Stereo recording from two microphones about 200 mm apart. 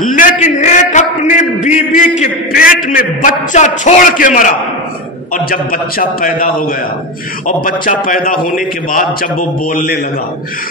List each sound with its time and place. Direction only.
0.0 s a man's voice: 40° left (ahead or behind)